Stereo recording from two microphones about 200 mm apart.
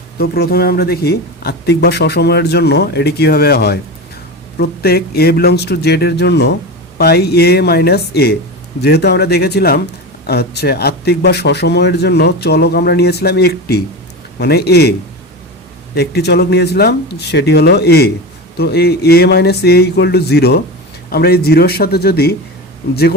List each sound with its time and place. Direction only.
0.2 s speech: 50° left (ahead or behind)
16.0 s speech: 55° left (ahead or behind)